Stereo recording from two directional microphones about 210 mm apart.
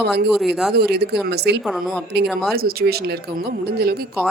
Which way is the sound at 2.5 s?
45° right (ahead or behind).